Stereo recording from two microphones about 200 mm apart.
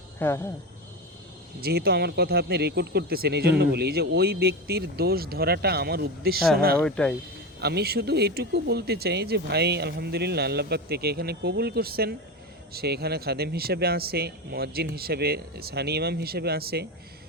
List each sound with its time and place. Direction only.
0.2 s speech: 10° left (ahead or behind)
1.6 s speech: 50° right (ahead or behind)
6.7 s speech: 5° left (ahead or behind)
7.6 s speech: 55° right (ahead or behind)